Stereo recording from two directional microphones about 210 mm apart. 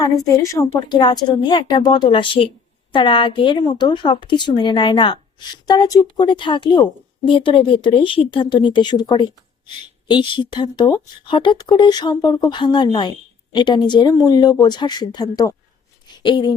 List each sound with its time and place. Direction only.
0.3 s a woman's voice: 15° left (ahead or behind)